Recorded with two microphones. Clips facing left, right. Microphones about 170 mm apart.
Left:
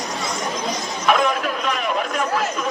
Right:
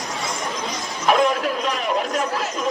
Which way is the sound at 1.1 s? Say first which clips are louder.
Right 1 dB; 35° right (ahead or behind).